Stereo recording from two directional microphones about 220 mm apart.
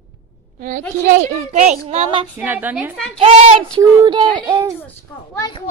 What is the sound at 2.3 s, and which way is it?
Speech, 10° right (ahead or behind).